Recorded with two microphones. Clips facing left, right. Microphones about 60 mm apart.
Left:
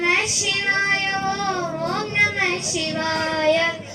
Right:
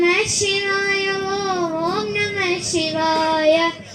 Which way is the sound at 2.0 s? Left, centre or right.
Left.